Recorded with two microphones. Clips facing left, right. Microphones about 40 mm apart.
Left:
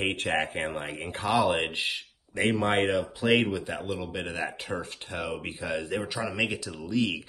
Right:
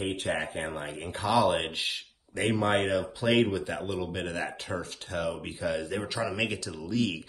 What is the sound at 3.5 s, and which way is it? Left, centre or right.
Speech, centre.